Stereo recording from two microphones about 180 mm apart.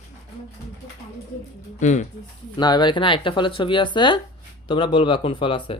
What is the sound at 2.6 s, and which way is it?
Speech, 25° left (ahead or behind).